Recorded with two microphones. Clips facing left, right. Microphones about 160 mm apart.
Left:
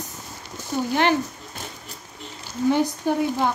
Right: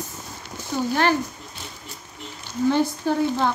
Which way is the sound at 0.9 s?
20° left (ahead or behind).